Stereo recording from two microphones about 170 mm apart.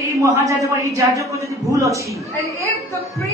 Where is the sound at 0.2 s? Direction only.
20° right (ahead or behind).